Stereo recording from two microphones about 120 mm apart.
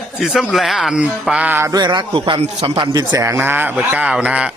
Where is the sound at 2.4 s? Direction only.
55° right (ahead or behind).